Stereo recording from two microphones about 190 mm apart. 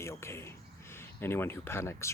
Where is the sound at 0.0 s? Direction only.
15° left (ahead or behind).